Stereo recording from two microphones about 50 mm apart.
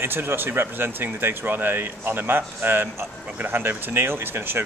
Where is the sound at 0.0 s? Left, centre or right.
Right.